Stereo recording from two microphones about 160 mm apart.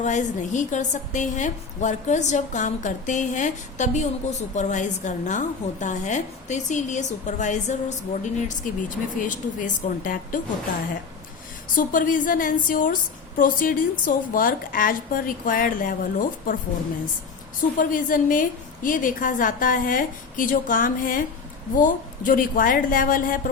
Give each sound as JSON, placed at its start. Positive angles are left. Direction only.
{"t": 0.0, "sound": "a woman's voice", "side_deg": 50}
{"t": 11.7, "sound": "a woman's voice", "side_deg": 55}
{"t": 17.7, "sound": "a woman's voice", "side_deg": 60}